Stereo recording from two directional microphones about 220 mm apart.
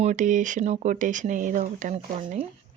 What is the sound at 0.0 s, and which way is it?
Speech, 35° right (ahead or behind).